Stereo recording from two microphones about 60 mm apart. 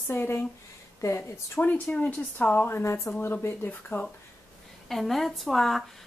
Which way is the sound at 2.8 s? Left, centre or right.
Left.